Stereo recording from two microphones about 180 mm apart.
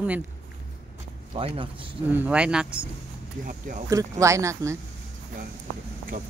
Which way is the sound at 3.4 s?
45° right (ahead or behind).